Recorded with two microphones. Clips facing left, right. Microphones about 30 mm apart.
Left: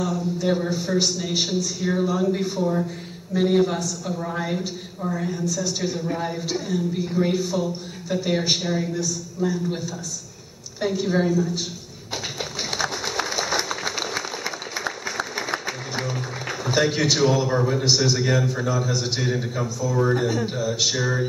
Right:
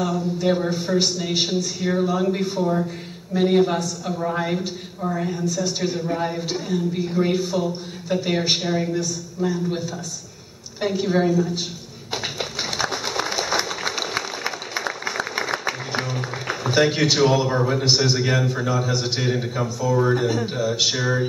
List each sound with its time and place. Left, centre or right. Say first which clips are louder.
0.4 s a man's voice: right 2 dB; centre
10.8 s a man's voice: right 2 dB; centre
12.1 s a sound: right 2 dB; centre
17.5 s a man's voice: right 1 dB; centre